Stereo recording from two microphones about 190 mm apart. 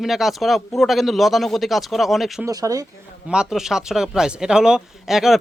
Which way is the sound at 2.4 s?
20° right (ahead or behind).